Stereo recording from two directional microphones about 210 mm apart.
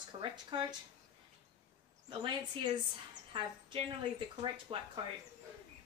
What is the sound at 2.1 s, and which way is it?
Speech, 20° right (ahead or behind).